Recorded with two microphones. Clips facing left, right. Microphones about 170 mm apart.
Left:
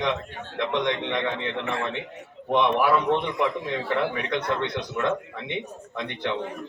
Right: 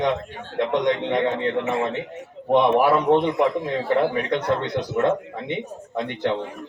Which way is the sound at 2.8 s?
40° right (ahead or behind).